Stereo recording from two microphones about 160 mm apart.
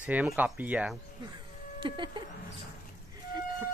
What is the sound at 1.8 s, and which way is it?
Speech, 30° right (ahead or behind).